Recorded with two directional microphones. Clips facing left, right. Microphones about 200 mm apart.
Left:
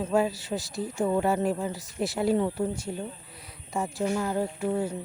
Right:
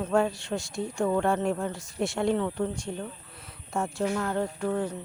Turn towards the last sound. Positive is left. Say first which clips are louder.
# left 1 dB
turn(degrees=10)  # may be behind; listen again after turning